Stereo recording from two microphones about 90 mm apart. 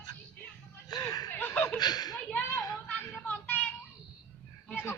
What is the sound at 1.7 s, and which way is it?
Chuckle, 50° left (ahead or behind).